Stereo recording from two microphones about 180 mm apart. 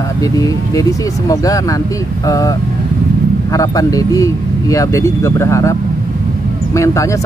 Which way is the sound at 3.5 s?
20° left (ahead or behind).